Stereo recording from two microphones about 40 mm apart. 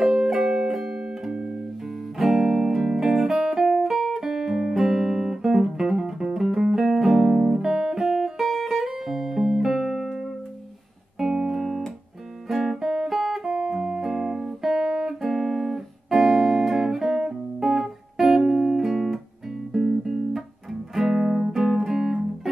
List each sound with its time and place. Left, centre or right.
0.0 s music: centre
0.9 s music: centre
2.1 s music: centre
3.1 s music: centre
3.5 s guitar: centre
4.1 s music: centre
8.0 s guitar: centre
8.5 s music: centre
11.1 s music: centre
12.4 s guitar: centre
13.2 s music: centre